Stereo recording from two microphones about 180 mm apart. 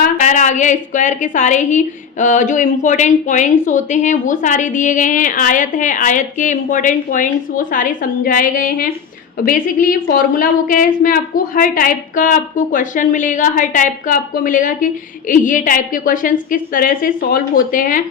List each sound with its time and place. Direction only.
0.2 s a woman's voice: 40° left (ahead or behind)